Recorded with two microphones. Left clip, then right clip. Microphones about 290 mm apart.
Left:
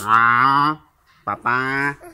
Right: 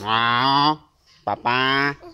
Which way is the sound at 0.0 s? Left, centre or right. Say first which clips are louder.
Left 5 dB; right.